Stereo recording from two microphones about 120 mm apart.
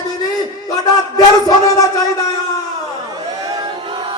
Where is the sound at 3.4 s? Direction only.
30° right (ahead or behind).